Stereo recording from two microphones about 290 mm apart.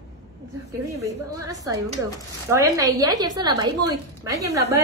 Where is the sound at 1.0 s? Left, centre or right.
Centre.